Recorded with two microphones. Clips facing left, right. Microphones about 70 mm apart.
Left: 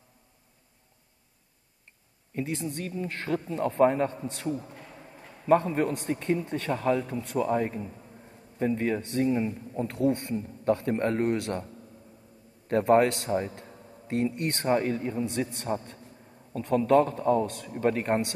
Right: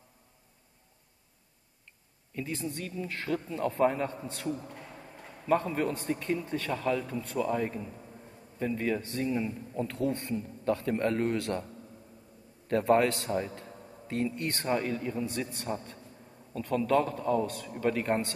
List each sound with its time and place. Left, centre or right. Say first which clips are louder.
2.3 s a woman's voice: left 4 dB; left
6.0 s a woman's voice: left 3 dB; left
9.3 s speech: left 4 dB; left
14.5 s a woman's voice: left 4 dB; left